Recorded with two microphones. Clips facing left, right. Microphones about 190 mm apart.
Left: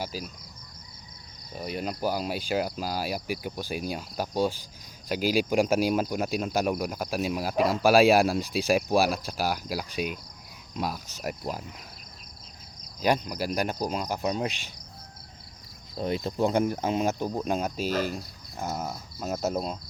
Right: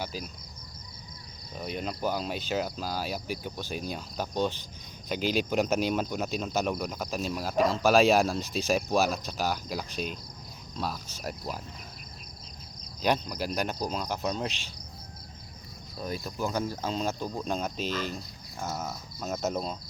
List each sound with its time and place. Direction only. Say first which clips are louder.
0.0 s speech: left 2 dB; 5° left (ahead or behind)
1.5 s speech: left 2 dB; 5° left (ahead or behind)
13.0 s speech: left 2 dB; 10° left (ahead or behind)
16.0 s speech: left 6 dB; 25° left (ahead or behind); by 19.7 s 5° left (ahead or behind)